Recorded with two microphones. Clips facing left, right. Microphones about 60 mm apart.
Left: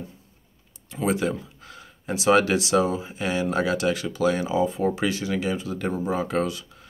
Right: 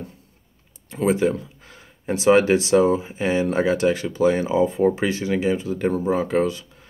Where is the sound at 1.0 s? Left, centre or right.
Right.